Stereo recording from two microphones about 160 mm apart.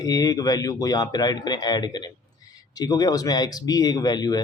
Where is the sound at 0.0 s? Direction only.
25° left (ahead or behind).